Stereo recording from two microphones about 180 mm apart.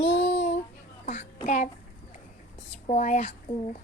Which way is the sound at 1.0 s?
40° left (ahead or behind).